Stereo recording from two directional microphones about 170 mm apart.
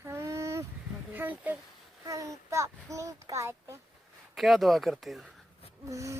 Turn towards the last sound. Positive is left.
turn(degrees=-20)  # may be behind; listen again after turning